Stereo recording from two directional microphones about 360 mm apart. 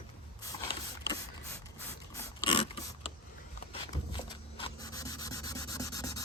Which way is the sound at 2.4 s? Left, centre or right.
Centre.